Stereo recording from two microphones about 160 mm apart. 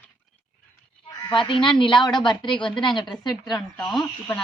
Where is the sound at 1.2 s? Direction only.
30° left (ahead or behind).